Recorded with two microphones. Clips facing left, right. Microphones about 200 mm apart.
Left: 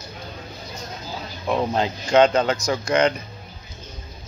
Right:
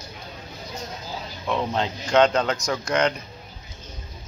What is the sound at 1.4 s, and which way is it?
Speech, 35° left (ahead or behind).